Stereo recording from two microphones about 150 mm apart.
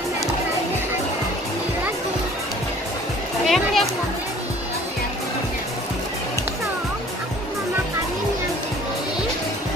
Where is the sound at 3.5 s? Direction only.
Centre (ahead or behind).